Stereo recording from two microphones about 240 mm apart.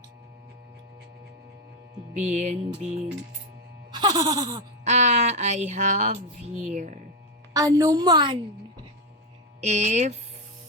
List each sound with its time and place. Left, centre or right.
2.1 s speech: right
3.9 s a sound: centre
4.8 s speech: right
7.5 s a woman's voice: centre
9.6 s speech: right